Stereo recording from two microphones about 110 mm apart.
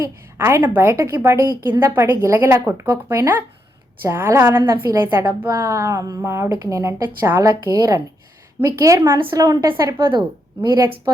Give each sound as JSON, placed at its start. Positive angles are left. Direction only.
{"t": 0.0, "sound": "a woman's voice", "side_deg": -25}
{"t": 7.4, "sound": "a woman's voice", "side_deg": -35}
{"t": 10.1, "sound": "a woman's voice", "side_deg": -45}